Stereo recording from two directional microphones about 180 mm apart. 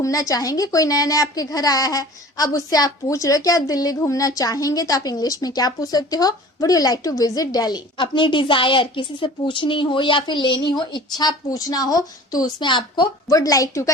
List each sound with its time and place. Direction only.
0.0 s a woman's voice: 20° left (ahead or behind)